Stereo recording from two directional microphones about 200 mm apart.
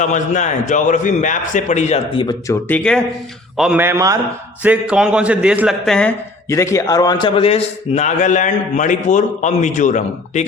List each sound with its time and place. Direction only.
0.0 s a man's voice: 35° left (ahead or behind)
2.2 s speech: 10° left (ahead or behind)
3.6 s a man's voice: 5° right (ahead or behind)
6.5 s a man's voice: 15° left (ahead or behind); by 10.4 s 40° left (ahead or behind)